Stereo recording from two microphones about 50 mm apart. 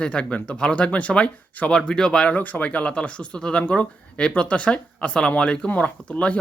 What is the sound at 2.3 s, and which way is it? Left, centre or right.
Speech, left.